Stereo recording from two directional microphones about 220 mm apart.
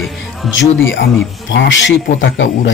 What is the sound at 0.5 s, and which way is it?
Speech, 60° left (ahead or behind).